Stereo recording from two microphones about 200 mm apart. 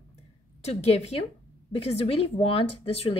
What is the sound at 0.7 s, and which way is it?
Speech, 30° left (ahead or behind).